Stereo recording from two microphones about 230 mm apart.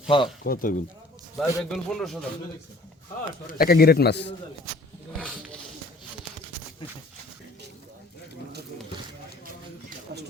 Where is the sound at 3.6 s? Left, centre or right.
Left.